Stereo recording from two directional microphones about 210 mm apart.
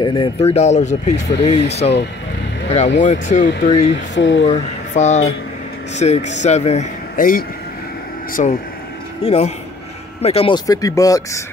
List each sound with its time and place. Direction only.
0.0 s speech: 20° left (ahead or behind)
3.0 s speech: 35° left (ahead or behind)
3.9 s speech: 60° left (ahead or behind)
4.5 s speech: 30° left (ahead or behind)